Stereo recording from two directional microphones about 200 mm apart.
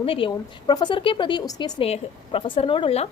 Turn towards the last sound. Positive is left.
turn(degrees=30)  # may be behind; listen again after turning